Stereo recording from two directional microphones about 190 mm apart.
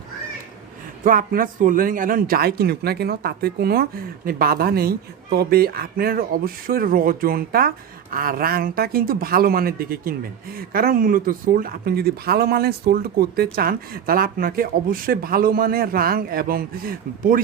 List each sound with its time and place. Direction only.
1.0 s speech: 45° right (ahead or behind)